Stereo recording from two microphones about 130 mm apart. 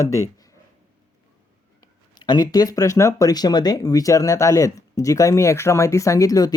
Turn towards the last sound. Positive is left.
turn(degrees=30)  # may be behind; listen again after turning